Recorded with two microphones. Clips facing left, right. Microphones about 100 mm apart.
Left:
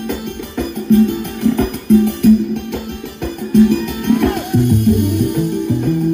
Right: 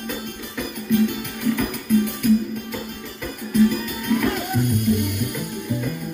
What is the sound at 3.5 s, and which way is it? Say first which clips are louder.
Music: left 7 dB; 60° left (ahead or behind).